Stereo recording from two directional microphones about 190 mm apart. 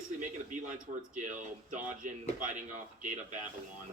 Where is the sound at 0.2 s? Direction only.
40° right (ahead or behind).